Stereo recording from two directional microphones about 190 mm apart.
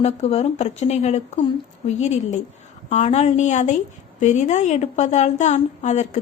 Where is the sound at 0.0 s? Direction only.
35° left (ahead or behind).